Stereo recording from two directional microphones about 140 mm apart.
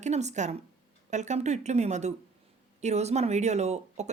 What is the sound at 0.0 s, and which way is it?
Speech, 55° right (ahead or behind).